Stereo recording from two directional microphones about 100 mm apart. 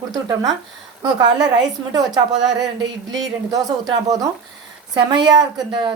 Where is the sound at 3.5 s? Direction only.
35° right (ahead or behind).